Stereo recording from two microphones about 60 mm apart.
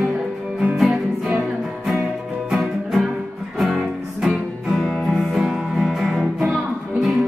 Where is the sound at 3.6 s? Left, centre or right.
Centre.